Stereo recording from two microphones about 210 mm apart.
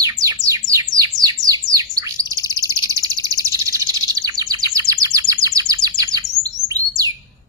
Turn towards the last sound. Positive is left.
turn(degrees=-15)  # may be behind; listen again after turning